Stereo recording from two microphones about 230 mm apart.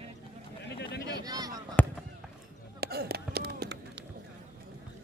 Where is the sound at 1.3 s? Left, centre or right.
Centre.